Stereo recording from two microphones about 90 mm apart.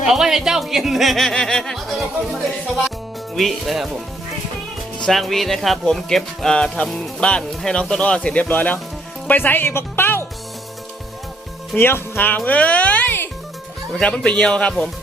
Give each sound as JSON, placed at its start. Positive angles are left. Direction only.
{"t": 0.0, "sound": "speech", "side_deg": -5}
{"t": 3.3, "sound": "speech", "side_deg": 0}
{"t": 4.9, "sound": "speech", "side_deg": 5}
{"t": 11.8, "sound": "speech", "side_deg": 25}
{"t": 12.5, "sound": "music", "side_deg": 15}
{"t": 14.0, "sound": "speech", "side_deg": 10}